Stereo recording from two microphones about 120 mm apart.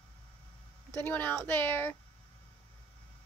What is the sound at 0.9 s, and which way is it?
Speech, 15° left (ahead or behind).